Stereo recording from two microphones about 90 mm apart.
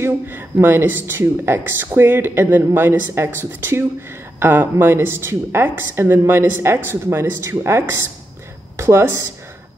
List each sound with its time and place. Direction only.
0.0 s speech: 25° right (ahead or behind)